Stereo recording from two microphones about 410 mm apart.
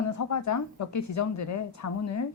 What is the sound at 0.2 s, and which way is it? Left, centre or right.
A woman's voice, left.